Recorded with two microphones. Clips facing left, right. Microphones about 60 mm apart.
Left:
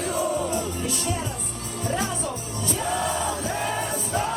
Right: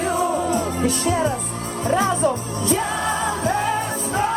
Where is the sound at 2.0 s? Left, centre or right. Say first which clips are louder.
Right 9 dB; right.